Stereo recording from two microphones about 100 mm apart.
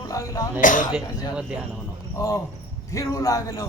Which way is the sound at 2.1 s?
30° left (ahead or behind).